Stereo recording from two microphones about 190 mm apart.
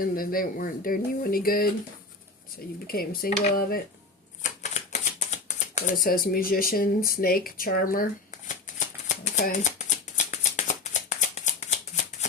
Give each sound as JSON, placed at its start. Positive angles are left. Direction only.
{"t": 0.0, "sound": "speech", "side_deg": 50}
{"t": 2.8, "sound": "speech", "side_deg": 50}
{"t": 4.6, "sound": "shuffling cards", "side_deg": 35}